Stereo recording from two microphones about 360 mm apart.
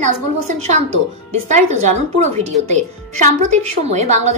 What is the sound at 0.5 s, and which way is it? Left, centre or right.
Speech, centre.